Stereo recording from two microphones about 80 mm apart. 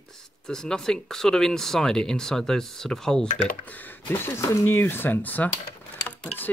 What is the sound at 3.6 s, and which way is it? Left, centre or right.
Speech, left.